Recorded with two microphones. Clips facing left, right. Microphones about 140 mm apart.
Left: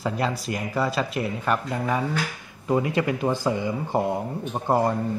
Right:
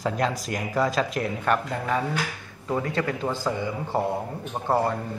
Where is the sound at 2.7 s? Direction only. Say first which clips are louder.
Left 3 dB; 15° left (ahead or behind).